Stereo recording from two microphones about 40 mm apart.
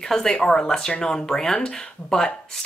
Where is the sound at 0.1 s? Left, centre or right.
Centre.